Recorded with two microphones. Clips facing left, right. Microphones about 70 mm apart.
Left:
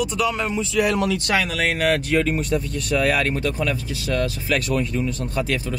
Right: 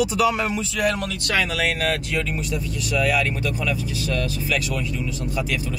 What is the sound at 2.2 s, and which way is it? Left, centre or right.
Speech, left.